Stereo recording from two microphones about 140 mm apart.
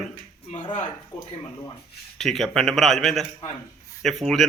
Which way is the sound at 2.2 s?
Centre (ahead or behind).